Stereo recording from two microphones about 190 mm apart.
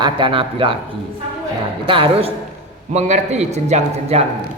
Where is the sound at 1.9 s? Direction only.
30° right (ahead or behind).